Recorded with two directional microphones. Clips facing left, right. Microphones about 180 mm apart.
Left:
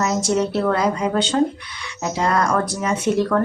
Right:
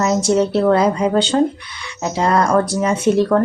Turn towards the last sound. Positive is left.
turn(degrees=-30)  # may be behind; listen again after turning